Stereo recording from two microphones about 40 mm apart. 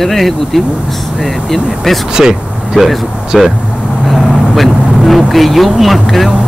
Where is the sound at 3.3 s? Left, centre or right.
Centre.